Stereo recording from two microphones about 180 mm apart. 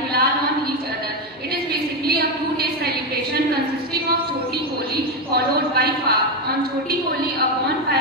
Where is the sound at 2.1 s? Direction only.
55° right (ahead or behind).